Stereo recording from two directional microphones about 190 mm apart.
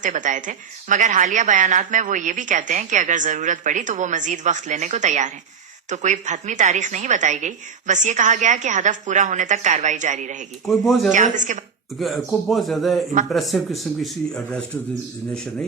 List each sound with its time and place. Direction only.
0.0 s a woman's voice: 40° right (ahead or behind)
10.7 s speech: centre (ahead or behind)
11.1 s a woman's voice: 40° right (ahead or behind)
11.9 s speech: centre (ahead or behind)